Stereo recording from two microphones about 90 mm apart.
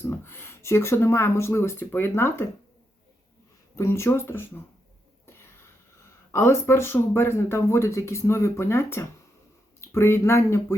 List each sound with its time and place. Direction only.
0.0 s speech: 25° left (ahead or behind)
3.8 s speech: 30° left (ahead or behind)
5.2 s a sound: 25° left (ahead or behind)
6.3 s speech: 30° left (ahead or behind)